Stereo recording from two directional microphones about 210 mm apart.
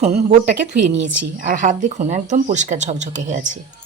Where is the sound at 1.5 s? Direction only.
35° right (ahead or behind).